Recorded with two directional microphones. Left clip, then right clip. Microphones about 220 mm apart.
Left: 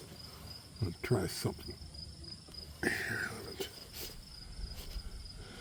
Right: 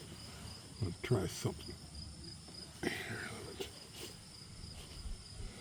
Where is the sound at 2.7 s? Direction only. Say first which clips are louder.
Left 6 dB; 25° left (ahead or behind).